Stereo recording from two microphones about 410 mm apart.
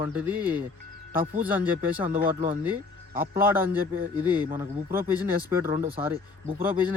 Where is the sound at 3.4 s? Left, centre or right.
Centre.